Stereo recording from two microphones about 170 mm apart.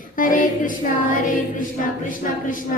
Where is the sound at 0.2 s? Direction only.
50° left (ahead or behind).